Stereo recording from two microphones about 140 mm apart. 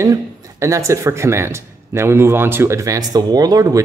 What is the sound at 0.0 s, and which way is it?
Speech, 20° right (ahead or behind).